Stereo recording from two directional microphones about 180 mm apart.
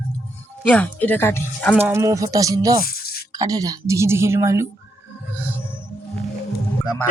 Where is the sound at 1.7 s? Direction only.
15° right (ahead or behind).